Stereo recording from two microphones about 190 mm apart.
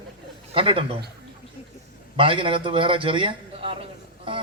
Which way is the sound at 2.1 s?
25° right (ahead or behind).